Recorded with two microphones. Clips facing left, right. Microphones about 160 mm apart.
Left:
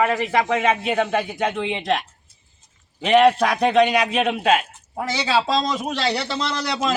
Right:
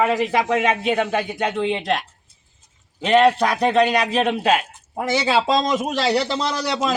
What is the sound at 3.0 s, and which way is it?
Speech, 5° left (ahead or behind).